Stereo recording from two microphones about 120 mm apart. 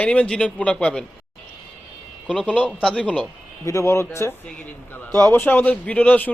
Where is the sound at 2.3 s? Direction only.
10° left (ahead or behind).